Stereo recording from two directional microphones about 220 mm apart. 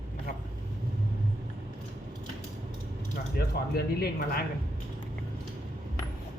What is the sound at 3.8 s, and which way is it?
Speech, 45° left (ahead or behind).